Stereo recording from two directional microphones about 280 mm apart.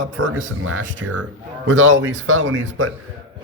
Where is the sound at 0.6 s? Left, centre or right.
Right.